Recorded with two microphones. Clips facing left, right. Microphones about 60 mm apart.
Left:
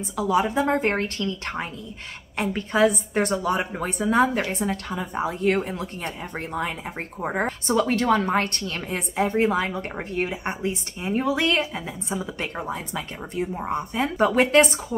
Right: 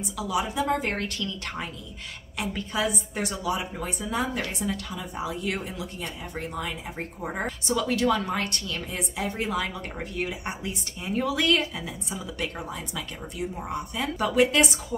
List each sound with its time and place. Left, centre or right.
0.0 s a woman's voice: left